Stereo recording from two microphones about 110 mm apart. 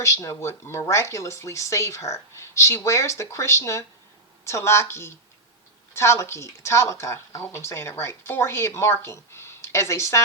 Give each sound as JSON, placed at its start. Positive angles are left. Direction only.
{"t": 0.0, "sound": "speech", "side_deg": 30}